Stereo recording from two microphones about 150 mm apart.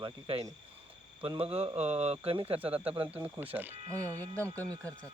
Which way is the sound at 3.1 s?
10° right (ahead or behind).